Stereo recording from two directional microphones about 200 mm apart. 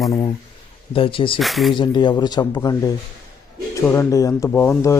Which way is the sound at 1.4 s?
Centre (ahead or behind).